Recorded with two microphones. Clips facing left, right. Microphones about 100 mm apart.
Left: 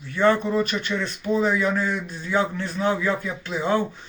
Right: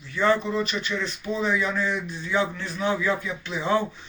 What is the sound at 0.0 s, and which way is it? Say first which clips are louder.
Speech: left 3 dB; 45° left (ahead or behind).